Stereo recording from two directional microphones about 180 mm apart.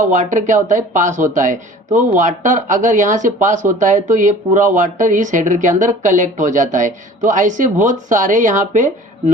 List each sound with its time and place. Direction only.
0.0 s speech: 45° right (ahead or behind)